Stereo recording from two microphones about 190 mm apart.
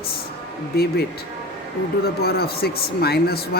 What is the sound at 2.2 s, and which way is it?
Speech, 55° left (ahead or behind).